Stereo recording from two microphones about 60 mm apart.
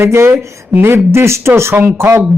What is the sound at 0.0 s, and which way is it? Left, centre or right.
Speech, right.